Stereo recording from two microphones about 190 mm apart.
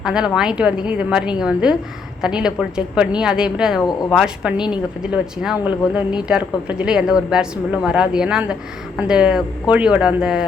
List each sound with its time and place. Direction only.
0.0 s speech: 5° right (ahead or behind)